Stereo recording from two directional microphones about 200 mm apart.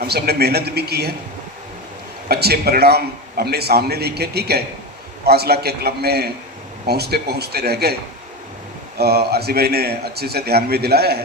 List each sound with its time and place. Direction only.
0.0 s a man's voice: 55° right (ahead or behind)
2.3 s a man's voice: 55° right (ahead or behind)
9.0 s a man's voice: 55° right (ahead or behind)